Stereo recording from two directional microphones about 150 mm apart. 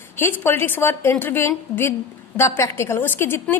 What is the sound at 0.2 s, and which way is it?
A woman's voice, 15° left (ahead or behind).